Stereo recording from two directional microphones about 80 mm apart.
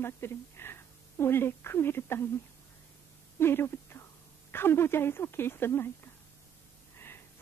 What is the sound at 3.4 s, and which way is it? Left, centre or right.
Speech, left.